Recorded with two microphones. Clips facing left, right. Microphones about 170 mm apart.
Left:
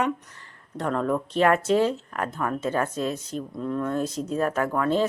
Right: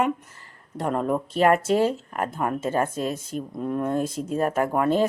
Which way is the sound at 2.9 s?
50° right (ahead or behind).